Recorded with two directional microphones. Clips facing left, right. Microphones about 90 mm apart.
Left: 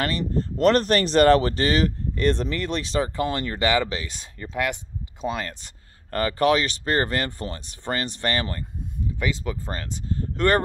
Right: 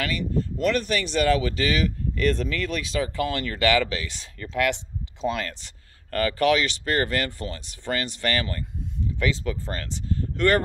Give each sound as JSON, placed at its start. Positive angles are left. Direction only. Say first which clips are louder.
{"t": 0.0, "sound": "speech", "louder": "left 2 dB", "side_deg": 40}
{"t": 0.6, "sound": "speech", "louder": "left 6 dB", "side_deg": 50}
{"t": 2.1, "sound": "speech", "louder": "left 1 dB", "side_deg": 25}